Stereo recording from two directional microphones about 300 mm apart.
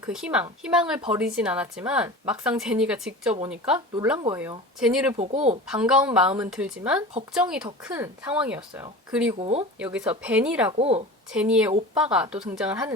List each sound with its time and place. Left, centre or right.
0.1 s speech: centre
5.1 s speech: right
5.6 s speech: centre
9.4 s speech: right
9.7 s speech: centre
10.8 s speech: centre
11.3 s speech: centre